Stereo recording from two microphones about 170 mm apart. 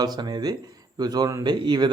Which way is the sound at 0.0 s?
25° right (ahead or behind).